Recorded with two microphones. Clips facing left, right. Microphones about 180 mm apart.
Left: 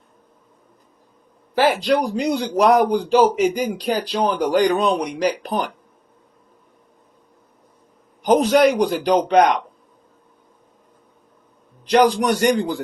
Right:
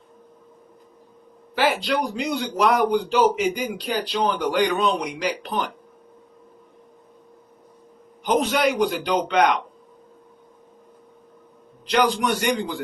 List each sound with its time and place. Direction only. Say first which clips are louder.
1.5 s speech: left 5 dB; 40° left (ahead or behind)
8.2 s a man's voice: left 6 dB; 40° left (ahead or behind)
11.9 s a man's voice: left 5 dB; 40° left (ahead or behind)